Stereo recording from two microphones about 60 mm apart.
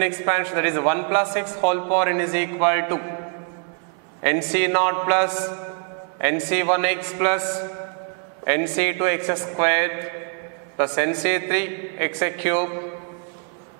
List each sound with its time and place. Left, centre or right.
0.0 s a man's voice: centre
4.2 s a man's voice: centre